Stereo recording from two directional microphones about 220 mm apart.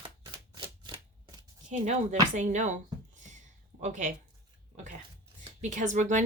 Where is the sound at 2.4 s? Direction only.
35° right (ahead or behind).